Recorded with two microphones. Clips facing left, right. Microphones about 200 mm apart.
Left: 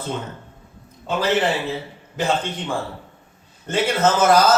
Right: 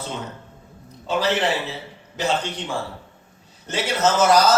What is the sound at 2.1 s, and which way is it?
A man's voice, 55° left (ahead or behind).